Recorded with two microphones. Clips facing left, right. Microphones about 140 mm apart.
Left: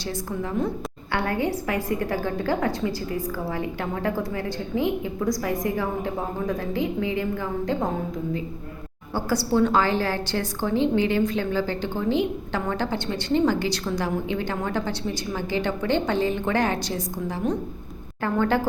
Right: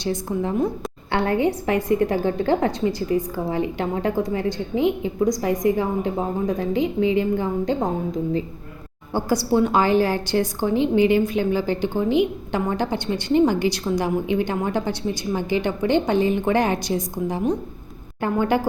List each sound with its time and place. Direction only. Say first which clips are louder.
0.0 s a woman's voice: right 5 dB; 20° right (ahead or behind)
9.1 s a woman's voice: right 3 dB; 15° right (ahead or behind)